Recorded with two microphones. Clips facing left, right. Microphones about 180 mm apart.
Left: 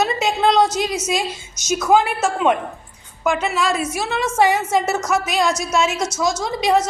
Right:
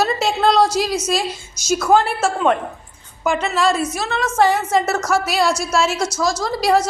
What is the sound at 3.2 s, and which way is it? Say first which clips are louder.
A woman's voice: right 2 dB; centre (ahead or behind).